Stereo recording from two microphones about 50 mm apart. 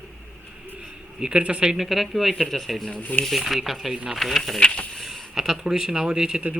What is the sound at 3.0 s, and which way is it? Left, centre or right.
Speech, left.